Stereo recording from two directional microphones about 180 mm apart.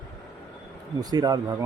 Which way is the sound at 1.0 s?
20° right (ahead or behind).